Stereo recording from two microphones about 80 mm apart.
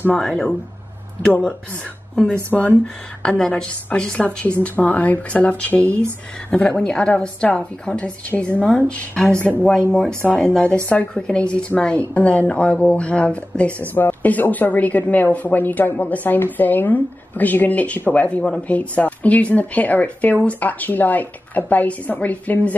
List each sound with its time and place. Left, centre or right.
2.5 s a woman's voice: centre